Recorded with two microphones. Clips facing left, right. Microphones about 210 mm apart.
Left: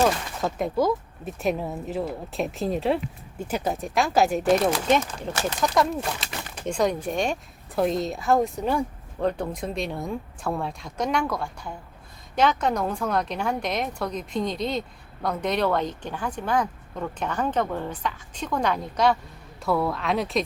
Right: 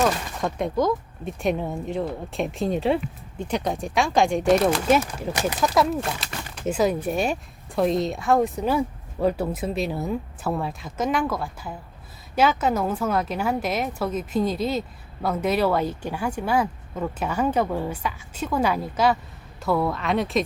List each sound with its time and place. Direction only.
0.0 s a woman's voice: centre (ahead or behind)
5.3 s speech: 15° right (ahead or behind)
5.5 s a woman's voice: 5° right (ahead or behind)